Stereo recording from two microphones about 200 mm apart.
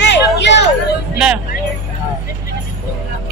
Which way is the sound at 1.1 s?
5° right (ahead or behind).